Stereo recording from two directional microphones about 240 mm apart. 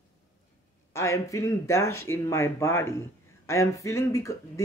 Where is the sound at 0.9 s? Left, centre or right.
Centre.